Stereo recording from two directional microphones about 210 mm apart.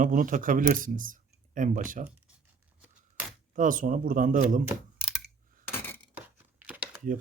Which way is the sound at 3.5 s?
40° right (ahead or behind).